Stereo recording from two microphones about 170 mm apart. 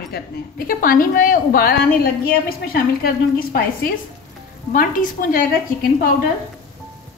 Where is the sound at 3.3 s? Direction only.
60° left (ahead or behind).